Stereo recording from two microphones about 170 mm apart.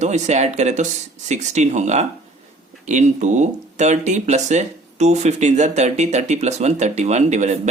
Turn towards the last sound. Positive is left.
turn(degrees=-45)  # may be behind; listen again after turning